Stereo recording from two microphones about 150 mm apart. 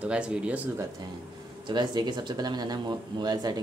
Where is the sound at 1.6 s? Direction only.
30° right (ahead or behind).